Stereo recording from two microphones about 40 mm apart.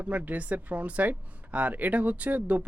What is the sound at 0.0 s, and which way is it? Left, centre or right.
Speech, right.